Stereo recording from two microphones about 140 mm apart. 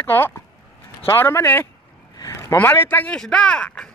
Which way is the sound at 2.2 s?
20° left (ahead or behind).